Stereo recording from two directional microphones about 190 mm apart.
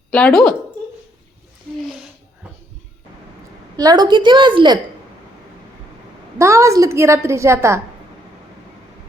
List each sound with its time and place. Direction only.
0.1 s speech: 5° left (ahead or behind)
3.8 s a woman's voice: 20° right (ahead or behind)
6.4 s a woman's voice: 15° right (ahead or behind)